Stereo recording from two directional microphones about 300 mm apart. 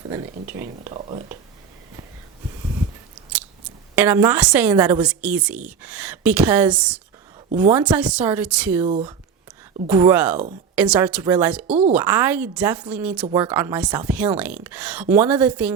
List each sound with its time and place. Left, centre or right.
0.1 s speech: centre
3.9 s a woman's voice: centre
9.9 s a woman's voice: centre